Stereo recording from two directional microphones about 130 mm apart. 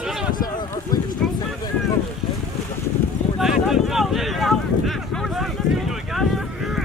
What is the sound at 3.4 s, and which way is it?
Boat, centre (ahead or behind).